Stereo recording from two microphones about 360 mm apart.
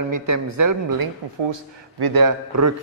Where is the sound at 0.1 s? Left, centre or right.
Right.